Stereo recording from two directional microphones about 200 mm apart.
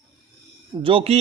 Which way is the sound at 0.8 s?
25° right (ahead or behind).